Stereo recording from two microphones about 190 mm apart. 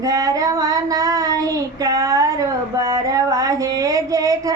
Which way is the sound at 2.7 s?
20° right (ahead or behind).